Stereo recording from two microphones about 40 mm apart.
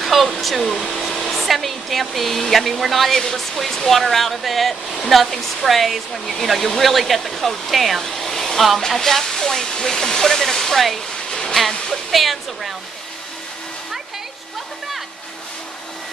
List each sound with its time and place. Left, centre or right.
0.0 s speech: centre
8.0 s hair dryer: centre
8.8 s speech: centre
11.1 s a sound: centre
11.9 s speech: centre